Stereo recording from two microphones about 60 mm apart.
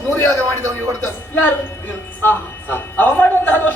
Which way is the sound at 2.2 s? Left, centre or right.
Left.